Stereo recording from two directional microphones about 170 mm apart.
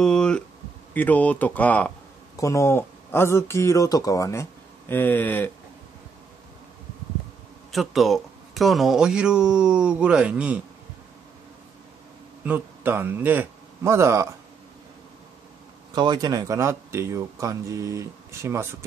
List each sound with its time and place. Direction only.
0.0 s a sound: 5° left (ahead or behind)
0.9 s speech: 10° left (ahead or behind)
7.7 s speech: centre (ahead or behind)
12.4 s a man's voice: 10° right (ahead or behind)
15.9 s speech: 25° right (ahead or behind)